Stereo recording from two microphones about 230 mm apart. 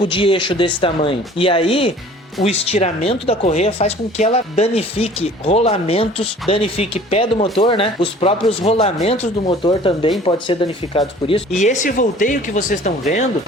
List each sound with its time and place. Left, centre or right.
0.1 s speech: left